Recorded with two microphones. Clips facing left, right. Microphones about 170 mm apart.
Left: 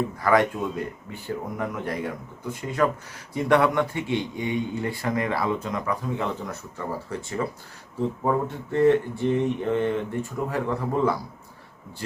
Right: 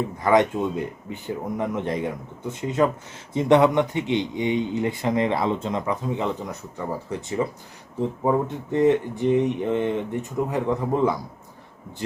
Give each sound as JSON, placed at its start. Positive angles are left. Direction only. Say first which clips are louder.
{"t": 0.2, "sound": "speech", "louder": "right 3 dB", "side_deg": -20}